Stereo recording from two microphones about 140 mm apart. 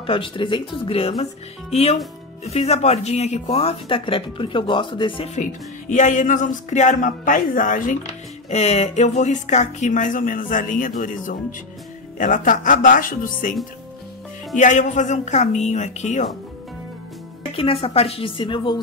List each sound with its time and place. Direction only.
0.0 s speech: 40° left (ahead or behind)
5.3 s speech: 60° left (ahead or behind)
8.5 s speech: 50° left (ahead or behind); by 13.6 s 75° left (ahead or behind)
14.5 s speech: 65° left (ahead or behind)
17.6 s speech: 40° left (ahead or behind)